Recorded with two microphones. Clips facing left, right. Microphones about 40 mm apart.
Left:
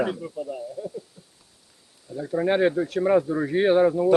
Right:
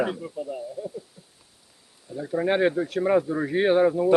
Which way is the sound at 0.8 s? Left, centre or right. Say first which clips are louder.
Even; centre.